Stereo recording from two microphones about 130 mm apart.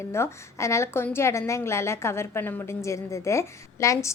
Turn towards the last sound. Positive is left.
turn(degrees=25)  # may be behind; listen again after turning